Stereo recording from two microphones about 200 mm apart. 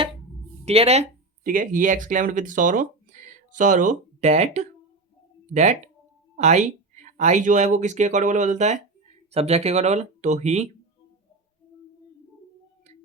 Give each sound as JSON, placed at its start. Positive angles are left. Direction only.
{"t": 0.6, "sound": "speech", "side_deg": -30}
{"t": 1.5, "sound": "speech", "side_deg": -40}